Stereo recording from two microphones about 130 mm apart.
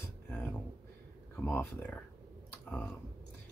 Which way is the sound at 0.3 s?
15° left (ahead or behind).